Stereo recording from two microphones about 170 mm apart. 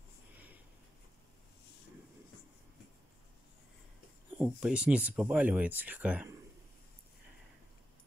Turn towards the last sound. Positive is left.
turn(degrees=-10)  # may be behind; listen again after turning